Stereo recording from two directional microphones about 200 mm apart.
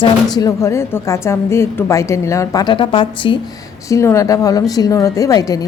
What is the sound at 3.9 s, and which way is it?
A woman's voice, 15° left (ahead or behind).